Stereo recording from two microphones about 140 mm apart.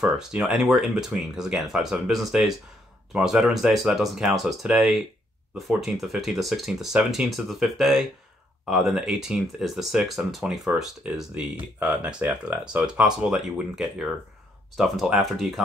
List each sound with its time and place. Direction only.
0.0 s speech: 5° right (ahead or behind)